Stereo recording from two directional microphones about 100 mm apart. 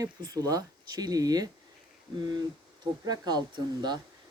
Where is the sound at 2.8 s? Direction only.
45° right (ahead or behind).